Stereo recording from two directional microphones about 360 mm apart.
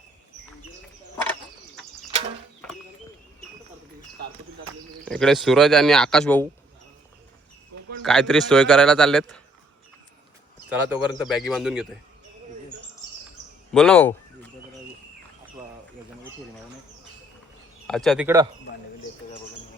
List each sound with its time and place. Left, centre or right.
1.2 s a sound: centre
2.0 s a sound: centre
5.0 s a man's voice: centre
8.0 s a man's voice: centre
10.7 s a man's voice: centre
13.7 s a man's voice: centre
17.8 s a man's voice: centre